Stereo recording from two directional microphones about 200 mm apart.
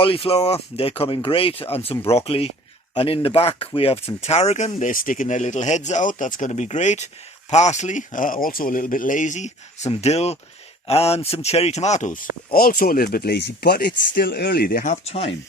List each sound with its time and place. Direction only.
0.0 s speech: 25° left (ahead or behind); by 14.9 s 45° left (ahead or behind)
15.0 s speech: 30° left (ahead or behind)